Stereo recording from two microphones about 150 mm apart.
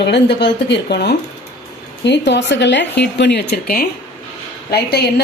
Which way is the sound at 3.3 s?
90° left.